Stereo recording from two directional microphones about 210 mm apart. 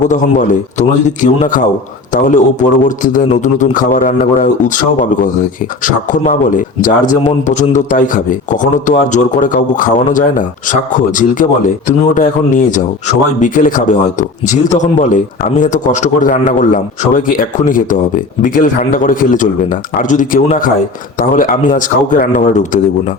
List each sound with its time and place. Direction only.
0.1 s speech: 35° left (ahead or behind)
5.8 s speech: 40° left (ahead or behind)